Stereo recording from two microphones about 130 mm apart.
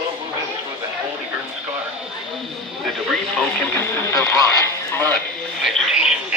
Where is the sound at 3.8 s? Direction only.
20° left (ahead or behind).